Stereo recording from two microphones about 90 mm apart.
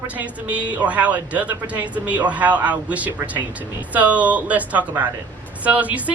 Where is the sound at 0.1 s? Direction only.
15° right (ahead or behind).